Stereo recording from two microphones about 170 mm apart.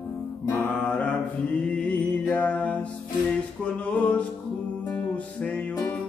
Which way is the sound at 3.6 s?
5° left (ahead or behind).